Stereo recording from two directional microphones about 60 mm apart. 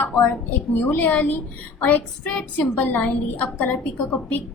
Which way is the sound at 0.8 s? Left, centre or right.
Left.